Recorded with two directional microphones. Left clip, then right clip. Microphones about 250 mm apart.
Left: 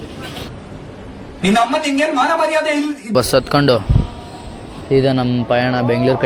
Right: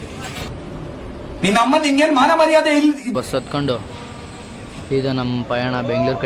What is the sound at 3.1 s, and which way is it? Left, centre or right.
Speech, left.